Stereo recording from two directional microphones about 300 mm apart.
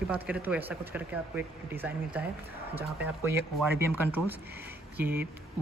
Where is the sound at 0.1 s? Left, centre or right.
Centre.